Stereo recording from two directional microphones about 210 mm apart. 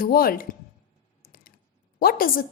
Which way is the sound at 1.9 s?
45° left (ahead or behind).